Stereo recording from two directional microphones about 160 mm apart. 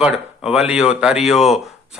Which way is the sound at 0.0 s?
5° right (ahead or behind).